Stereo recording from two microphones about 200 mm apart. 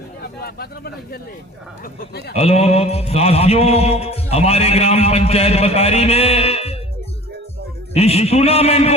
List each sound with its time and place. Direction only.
0.2 s speech: 50° left (ahead or behind)
2.3 s mantra: 30° left (ahead or behind)
7.9 s mantra: 30° left (ahead or behind)